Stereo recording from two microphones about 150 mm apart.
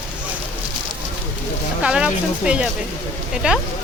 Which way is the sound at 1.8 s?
5° right (ahead or behind).